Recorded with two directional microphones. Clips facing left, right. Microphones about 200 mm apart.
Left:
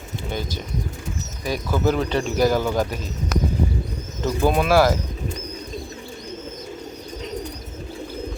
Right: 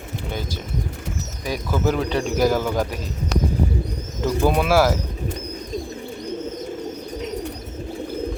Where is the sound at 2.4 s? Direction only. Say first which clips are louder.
Even; 10° right (ahead or behind).